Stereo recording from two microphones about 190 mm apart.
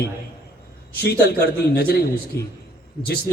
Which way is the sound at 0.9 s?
55° left (ahead or behind).